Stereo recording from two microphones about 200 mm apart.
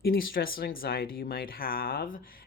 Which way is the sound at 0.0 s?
45° left (ahead or behind).